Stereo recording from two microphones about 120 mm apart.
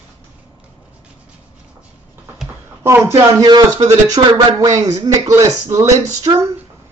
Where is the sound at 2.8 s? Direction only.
20° right (ahead or behind).